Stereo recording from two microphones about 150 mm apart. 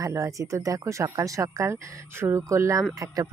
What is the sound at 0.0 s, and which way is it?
Speech, 20° right (ahead or behind).